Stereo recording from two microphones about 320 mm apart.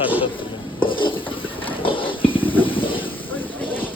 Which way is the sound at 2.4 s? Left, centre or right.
Centre.